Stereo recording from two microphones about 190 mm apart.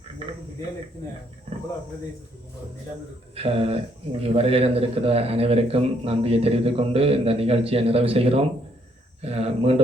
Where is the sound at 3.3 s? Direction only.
30° right (ahead or behind).